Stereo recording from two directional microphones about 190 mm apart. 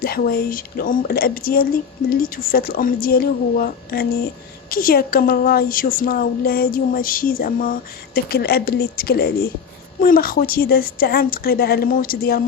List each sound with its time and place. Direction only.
0.0 s a woman's voice: 50° left (ahead or behind)